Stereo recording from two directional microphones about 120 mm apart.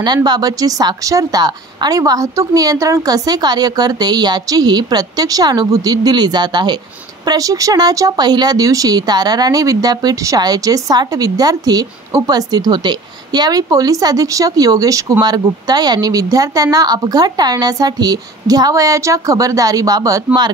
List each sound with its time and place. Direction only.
0.0 s speech: 35° right (ahead or behind)